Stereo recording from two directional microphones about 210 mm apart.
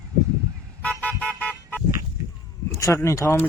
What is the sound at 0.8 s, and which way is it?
Toot, 5° left (ahead or behind).